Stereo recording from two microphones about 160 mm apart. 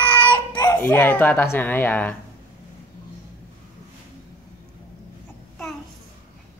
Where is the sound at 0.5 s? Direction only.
25° left (ahead or behind).